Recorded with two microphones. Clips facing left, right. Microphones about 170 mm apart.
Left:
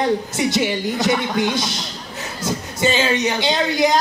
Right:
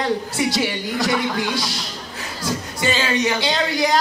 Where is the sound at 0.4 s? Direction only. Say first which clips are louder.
Left 2 dB; 20° left (ahead or behind).